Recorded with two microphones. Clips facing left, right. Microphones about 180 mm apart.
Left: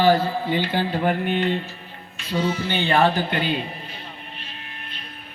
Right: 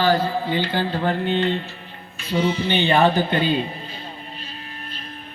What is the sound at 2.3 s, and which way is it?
A man's voice, 20° right (ahead or behind).